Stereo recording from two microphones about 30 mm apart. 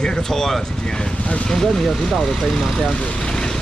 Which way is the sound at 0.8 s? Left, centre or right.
Left.